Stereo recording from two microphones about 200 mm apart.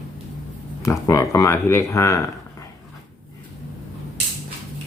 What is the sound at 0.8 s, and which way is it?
Speech, 15° left (ahead or behind).